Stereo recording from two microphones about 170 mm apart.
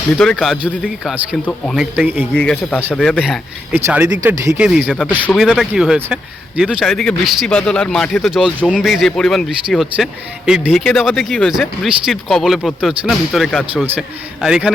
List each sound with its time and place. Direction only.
0.2 s a man's voice: centre (ahead or behind)
2.3 s a man's voice: 5° left (ahead or behind)
3.8 s a man's voice: 15° right (ahead or behind)